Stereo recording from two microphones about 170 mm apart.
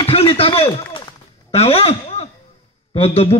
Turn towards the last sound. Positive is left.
turn(degrees=35)  # may be behind; listen again after turning